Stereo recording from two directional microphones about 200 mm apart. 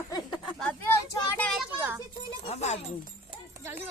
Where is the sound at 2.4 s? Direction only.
30° left (ahead or behind).